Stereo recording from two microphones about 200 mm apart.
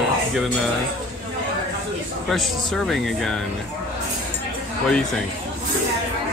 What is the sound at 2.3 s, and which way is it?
Speech, centre (ahead or behind).